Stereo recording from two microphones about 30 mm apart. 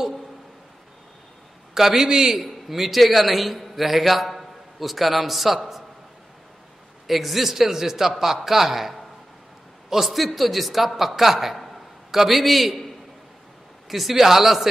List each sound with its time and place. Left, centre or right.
1.7 s a man's voice: centre
2.4 s a man's voice: centre
7.1 s a man's voice: centre
13.8 s a man's voice: centre